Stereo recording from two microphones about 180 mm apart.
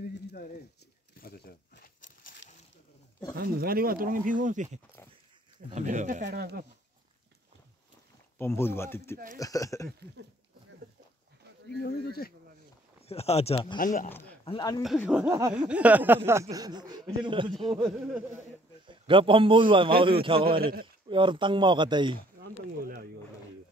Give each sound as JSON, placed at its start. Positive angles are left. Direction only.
{"t": 0.1, "sound": "horse", "side_deg": 65}
{"t": 1.2, "sound": "crumpling", "side_deg": 60}
{"t": 3.3, "sound": "speech", "side_deg": -55}
{"t": 5.7, "sound": "speech", "side_deg": -40}
{"t": 8.4, "sound": "speech", "side_deg": 15}
{"t": 11.8, "sound": "speech", "side_deg": 60}
{"t": 13.0, "sound": "speech", "side_deg": 35}
{"t": 13.7, "sound": "speech", "side_deg": 50}
{"t": 14.4, "sound": "speech", "side_deg": 25}
{"t": 15.0, "sound": "a sound", "side_deg": -5}
{"t": 16.3, "sound": "a man's voice", "side_deg": -15}
{"t": 17.8, "sound": "speech", "side_deg": -5}
{"t": 18.9, "sound": "a man's voice", "side_deg": -30}